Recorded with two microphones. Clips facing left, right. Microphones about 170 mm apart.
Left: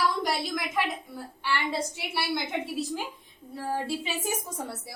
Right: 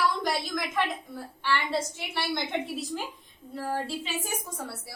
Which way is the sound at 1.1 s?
10° left (ahead or behind).